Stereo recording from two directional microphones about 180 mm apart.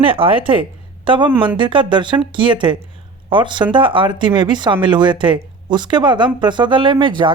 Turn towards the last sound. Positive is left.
turn(degrees=-25)  # may be behind; listen again after turning